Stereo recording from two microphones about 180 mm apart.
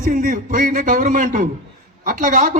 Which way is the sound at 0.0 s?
50° right (ahead or behind).